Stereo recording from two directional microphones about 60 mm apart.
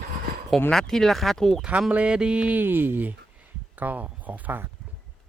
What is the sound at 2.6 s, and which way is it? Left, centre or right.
Speech, right.